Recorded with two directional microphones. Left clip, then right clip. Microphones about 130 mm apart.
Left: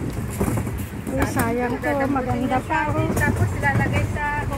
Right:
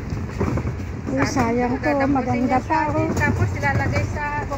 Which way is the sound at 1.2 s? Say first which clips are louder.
Right 2 dB; 30° right (ahead or behind).